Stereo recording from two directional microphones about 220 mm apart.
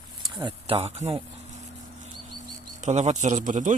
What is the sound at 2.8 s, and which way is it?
Speech, 30° right (ahead or behind).